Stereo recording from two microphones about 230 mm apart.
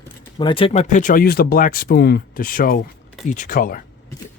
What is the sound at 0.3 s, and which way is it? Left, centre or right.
Speech, left.